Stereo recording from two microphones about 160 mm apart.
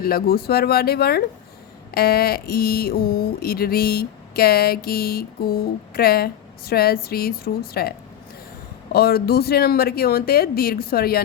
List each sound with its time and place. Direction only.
0.0 s speech: 70° left (ahead or behind)